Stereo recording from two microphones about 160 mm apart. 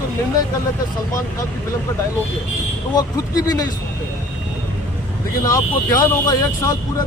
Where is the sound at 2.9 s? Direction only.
25° left (ahead or behind).